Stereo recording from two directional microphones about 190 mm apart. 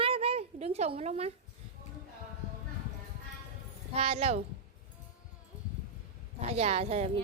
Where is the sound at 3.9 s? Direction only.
30° right (ahead or behind).